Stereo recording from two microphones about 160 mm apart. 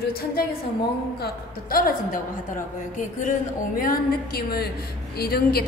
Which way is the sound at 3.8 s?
70° left (ahead or behind).